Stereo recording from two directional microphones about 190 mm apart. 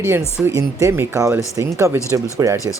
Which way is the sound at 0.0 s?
10° right (ahead or behind).